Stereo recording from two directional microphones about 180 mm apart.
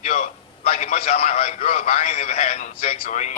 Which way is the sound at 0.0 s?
40° left (ahead or behind).